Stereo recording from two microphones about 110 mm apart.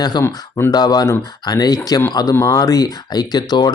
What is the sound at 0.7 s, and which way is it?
Speech, 40° left (ahead or behind).